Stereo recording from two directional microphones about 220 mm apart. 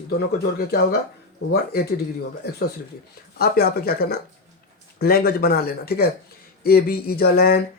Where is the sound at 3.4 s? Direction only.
45° left (ahead or behind).